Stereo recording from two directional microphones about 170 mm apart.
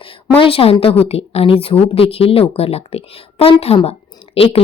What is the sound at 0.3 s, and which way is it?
Speech, 35° left (ahead or behind).